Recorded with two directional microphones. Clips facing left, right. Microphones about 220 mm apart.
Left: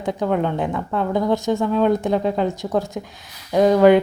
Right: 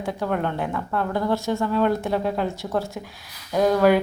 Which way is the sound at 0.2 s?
15° left (ahead or behind).